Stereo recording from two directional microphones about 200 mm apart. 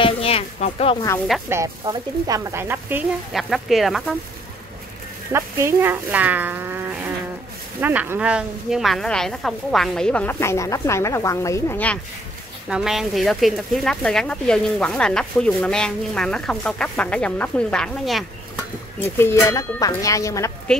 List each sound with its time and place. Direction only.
0.0 s a sound: 30° left (ahead or behind)
1.5 s speech: 15° right (ahead or behind)
3.3 s speech: centre (ahead or behind)
5.3 s speech: 15° right (ahead or behind); by 12.0 s 10° left (ahead or behind)
12.6 s speech: 5° right (ahead or behind)
18.9 s speech: 10° left (ahead or behind)